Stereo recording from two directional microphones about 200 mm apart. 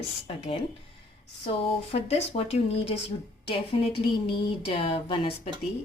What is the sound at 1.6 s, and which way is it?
Speech, 30° left (ahead or behind).